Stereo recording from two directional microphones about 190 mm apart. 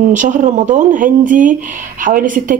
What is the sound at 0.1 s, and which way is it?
Speech, 40° right (ahead or behind).